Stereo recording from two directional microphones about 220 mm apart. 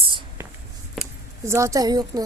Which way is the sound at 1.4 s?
15° right (ahead or behind).